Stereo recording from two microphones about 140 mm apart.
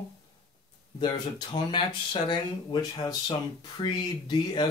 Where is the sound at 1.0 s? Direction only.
30° left (ahead or behind).